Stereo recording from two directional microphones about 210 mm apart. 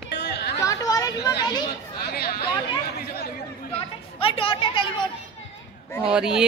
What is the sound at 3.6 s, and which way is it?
Chatter, 25° left (ahead or behind).